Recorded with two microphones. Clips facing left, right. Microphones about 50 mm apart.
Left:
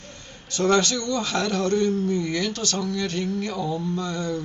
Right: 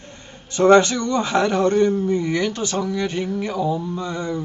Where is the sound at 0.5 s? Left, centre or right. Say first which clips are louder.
Right 7 dB; right.